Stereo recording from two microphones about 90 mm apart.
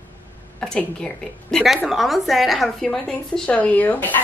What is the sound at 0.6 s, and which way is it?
A woman's voice, 5° left (ahead or behind).